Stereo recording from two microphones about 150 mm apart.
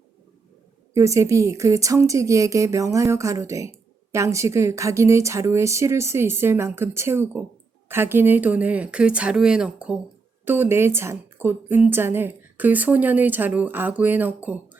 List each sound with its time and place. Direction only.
0.9 s a woman's voice: 20° right (ahead or behind)